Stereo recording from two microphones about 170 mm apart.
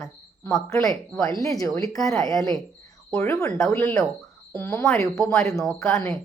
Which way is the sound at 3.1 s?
15° left (ahead or behind).